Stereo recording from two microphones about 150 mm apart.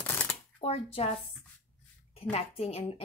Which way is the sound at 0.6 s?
40° left (ahead or behind).